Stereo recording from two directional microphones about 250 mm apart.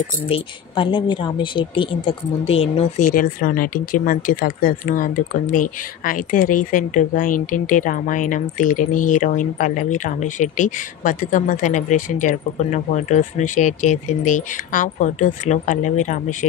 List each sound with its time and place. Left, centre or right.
0.3 s speech: centre